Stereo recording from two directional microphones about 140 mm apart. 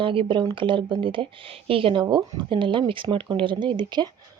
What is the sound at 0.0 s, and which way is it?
Speech, 40° right (ahead or behind).